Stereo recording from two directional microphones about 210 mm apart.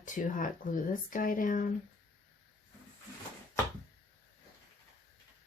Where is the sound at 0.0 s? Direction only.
40° left (ahead or behind).